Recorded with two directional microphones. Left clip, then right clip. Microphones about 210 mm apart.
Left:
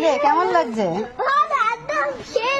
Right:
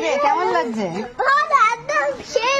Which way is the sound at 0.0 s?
30° left (ahead or behind).